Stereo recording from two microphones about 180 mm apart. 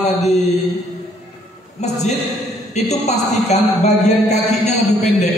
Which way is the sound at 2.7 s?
40° left (ahead or behind).